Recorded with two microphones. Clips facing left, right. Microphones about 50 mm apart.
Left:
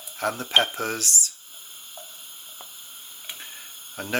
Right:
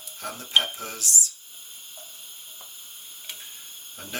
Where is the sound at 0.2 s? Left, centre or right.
Left.